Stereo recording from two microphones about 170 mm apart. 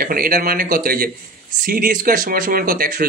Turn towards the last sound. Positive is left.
turn(degrees=-55)  # may be behind; listen again after turning